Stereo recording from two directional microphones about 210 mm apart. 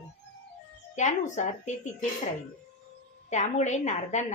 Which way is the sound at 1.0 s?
35° left (ahead or behind).